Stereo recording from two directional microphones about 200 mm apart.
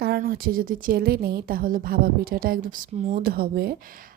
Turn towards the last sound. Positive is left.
turn(degrees=-45)  # may be behind; listen again after turning